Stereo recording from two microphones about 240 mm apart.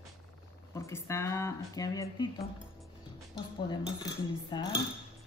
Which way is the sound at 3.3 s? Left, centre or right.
Centre.